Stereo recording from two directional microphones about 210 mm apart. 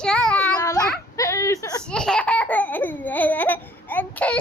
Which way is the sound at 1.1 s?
15° left (ahead or behind).